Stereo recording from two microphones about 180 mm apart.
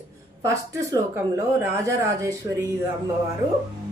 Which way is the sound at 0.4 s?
15° right (ahead or behind).